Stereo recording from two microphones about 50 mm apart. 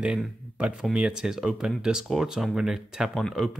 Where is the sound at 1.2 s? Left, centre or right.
Centre.